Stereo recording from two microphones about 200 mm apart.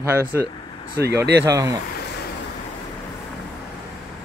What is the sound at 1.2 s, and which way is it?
Speech, 60° right (ahead or behind).